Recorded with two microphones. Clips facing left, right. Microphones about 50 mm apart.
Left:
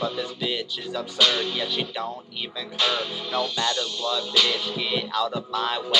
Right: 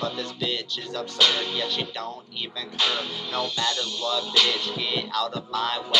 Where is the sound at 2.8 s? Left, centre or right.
Left.